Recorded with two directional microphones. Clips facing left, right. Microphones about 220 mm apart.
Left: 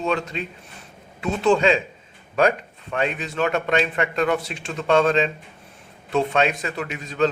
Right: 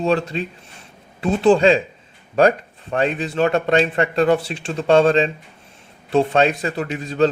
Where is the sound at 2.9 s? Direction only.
35° right (ahead or behind).